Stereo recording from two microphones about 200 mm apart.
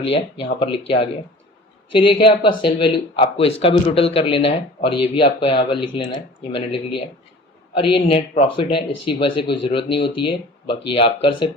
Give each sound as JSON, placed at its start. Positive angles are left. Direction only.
{"t": 0.0, "sound": "speech", "side_deg": 30}